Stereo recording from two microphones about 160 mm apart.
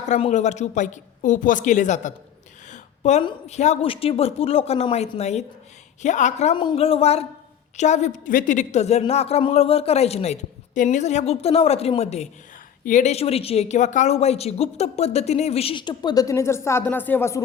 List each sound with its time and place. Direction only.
0.1 s a woman's voice: 45° left (ahead or behind)
2.6 s a sound: 45° left (ahead or behind)
3.4 s a woman's voice: 45° left (ahead or behind)
6.6 s a woman's voice: 35° left (ahead or behind); by 17.4 s 15° left (ahead or behind)